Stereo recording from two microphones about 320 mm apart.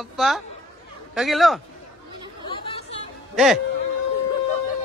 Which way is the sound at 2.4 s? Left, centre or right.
Centre.